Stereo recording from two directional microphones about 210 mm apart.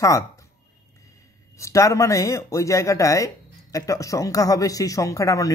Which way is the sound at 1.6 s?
15° left (ahead or behind).